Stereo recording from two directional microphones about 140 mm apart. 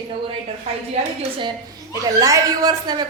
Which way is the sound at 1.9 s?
25° right (ahead or behind).